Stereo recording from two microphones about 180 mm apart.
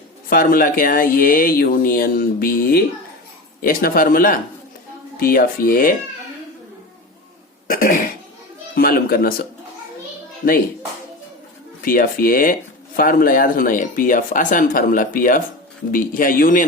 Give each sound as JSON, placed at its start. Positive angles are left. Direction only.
{"t": 0.3, "sound": "speech", "side_deg": 50}
{"t": 7.7, "sound": "speech", "side_deg": 50}
{"t": 11.8, "sound": "speech", "side_deg": 50}